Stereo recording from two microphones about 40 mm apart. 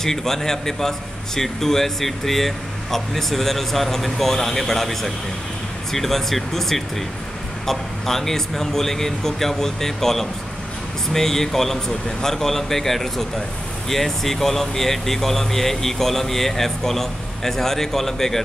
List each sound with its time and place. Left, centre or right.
0.0 s a man's voice: centre